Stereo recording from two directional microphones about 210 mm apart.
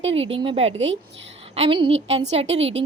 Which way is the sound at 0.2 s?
25° right (ahead or behind).